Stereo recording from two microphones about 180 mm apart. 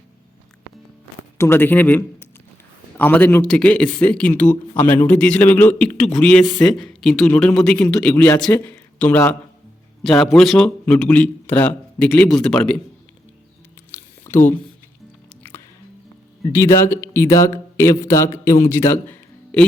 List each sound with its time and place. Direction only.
1.4 s a man's voice: 15° left (ahead or behind)
13.9 s a sound: 15° left (ahead or behind)
16.5 s a man's voice: 15° left (ahead or behind)